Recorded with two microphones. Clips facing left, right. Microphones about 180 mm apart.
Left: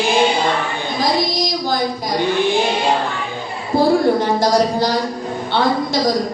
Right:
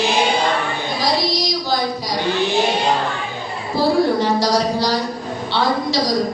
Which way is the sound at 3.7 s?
50° left (ahead or behind).